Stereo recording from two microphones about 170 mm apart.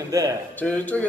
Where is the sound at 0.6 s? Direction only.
10° left (ahead or behind).